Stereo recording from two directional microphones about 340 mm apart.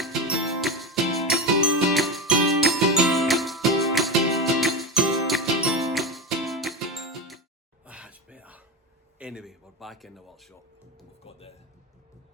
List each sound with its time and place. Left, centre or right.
0.0 s music: centre
7.9 s a sound: centre
11.2 s music: centre